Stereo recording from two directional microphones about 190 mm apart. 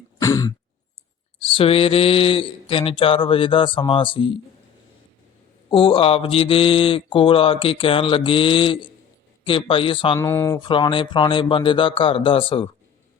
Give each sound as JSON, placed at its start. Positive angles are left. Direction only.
{"t": 0.2, "sound": "throat clearing", "side_deg": 15}
{"t": 1.5, "sound": "mantra", "side_deg": 30}
{"t": 5.7, "sound": "mantra", "side_deg": 30}
{"t": 10.2, "sound": "speech", "side_deg": 15}
{"t": 10.6, "sound": "mantra", "side_deg": 25}